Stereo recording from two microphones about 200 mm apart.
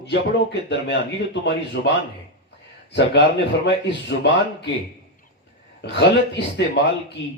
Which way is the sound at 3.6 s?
60° left (ahead or behind).